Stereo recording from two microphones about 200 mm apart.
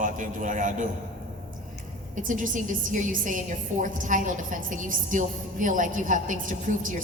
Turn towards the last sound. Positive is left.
turn(degrees=-40)  # may be behind; listen again after turning